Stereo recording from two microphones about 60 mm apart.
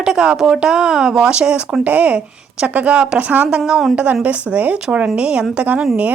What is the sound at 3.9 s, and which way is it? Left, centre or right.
Speech, right.